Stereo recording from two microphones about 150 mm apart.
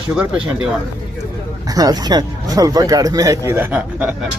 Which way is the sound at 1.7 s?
25° right (ahead or behind).